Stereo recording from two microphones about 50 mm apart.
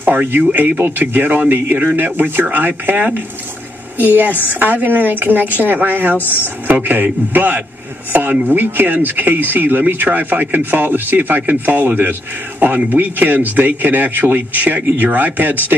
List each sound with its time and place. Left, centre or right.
0.0 s speech: right
4.1 s speech: right
6.1 s speech: left
6.7 s speech: right